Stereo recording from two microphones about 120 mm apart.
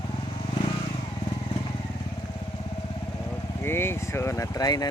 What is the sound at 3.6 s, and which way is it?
Speech, 20° left (ahead or behind).